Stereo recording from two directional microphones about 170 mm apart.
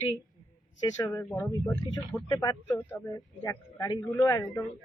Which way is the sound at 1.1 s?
15° left (ahead or behind).